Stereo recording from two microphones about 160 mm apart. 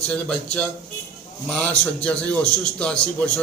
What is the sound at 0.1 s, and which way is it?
A man's voice, 5° left (ahead or behind).